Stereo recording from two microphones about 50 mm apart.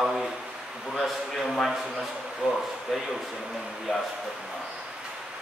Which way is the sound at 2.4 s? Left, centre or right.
Right.